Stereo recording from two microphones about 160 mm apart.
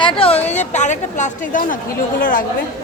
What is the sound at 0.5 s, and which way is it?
A woman's voice, 45° left (ahead or behind).